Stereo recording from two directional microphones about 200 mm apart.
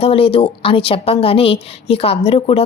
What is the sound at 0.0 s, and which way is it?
A woman's voice, 30° left (ahead or behind).